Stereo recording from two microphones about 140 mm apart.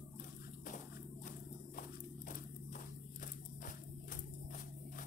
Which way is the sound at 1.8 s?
75° left (ahead or behind).